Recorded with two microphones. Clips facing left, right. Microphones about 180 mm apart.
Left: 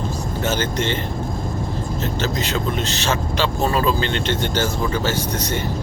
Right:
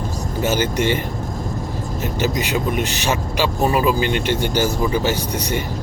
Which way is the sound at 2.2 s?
15° right (ahead or behind).